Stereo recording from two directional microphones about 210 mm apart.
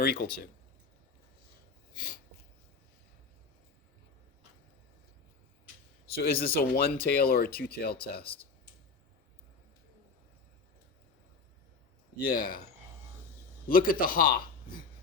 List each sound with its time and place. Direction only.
0.0 s speech: 45° left (ahead or behind)
2.0 s a sound: 40° left (ahead or behind)
6.2 s speech: 45° left (ahead or behind)
8.2 s speech: 25° left (ahead or behind)
12.3 s speech: 45° left (ahead or behind)
13.7 s speech: 40° left (ahead or behind)